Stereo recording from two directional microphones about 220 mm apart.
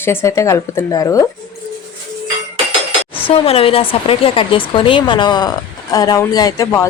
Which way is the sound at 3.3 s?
25° left (ahead or behind).